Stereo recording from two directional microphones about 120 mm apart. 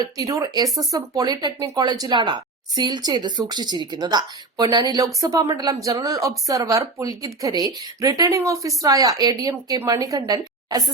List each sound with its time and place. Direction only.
0.0 s speech: 30° right (ahead or behind)